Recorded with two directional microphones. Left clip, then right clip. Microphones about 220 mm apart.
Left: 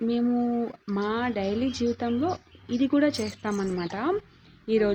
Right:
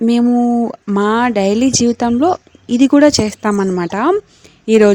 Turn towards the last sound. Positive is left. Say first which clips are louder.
# right 14 dB
turn(degrees=-45)  # may be behind; listen again after turning